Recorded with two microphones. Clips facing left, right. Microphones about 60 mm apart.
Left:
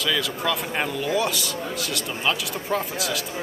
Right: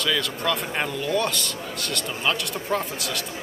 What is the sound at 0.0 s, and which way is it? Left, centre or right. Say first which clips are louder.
A man's voice: even; centre.